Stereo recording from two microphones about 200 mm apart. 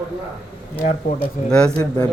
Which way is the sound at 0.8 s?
40° left (ahead or behind).